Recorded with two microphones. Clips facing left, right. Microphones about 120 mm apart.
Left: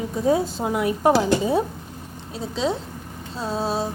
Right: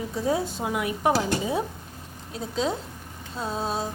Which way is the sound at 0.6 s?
35° left (ahead or behind).